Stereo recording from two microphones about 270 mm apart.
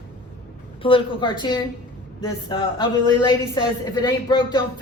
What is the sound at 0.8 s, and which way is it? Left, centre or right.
A man's voice, centre.